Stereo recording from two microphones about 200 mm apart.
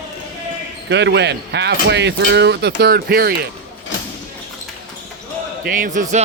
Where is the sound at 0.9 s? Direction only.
60° right (ahead or behind).